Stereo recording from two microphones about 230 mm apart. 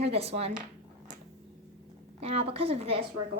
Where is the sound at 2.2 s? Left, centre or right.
Right.